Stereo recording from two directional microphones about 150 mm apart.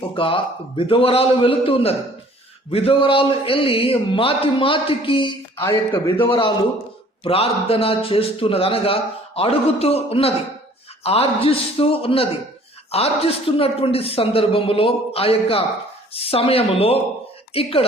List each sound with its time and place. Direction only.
0.2 s a man's voice: 35° left (ahead or behind)